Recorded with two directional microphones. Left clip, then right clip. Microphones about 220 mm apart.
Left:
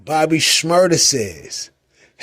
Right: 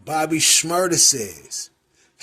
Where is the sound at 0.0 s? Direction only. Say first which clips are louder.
Left 4 dB; 45° left (ahead or behind).